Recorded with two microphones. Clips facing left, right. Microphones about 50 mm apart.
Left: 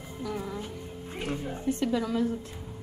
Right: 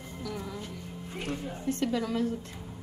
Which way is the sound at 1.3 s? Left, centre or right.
Left.